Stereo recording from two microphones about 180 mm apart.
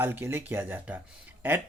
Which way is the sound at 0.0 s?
10° right (ahead or behind).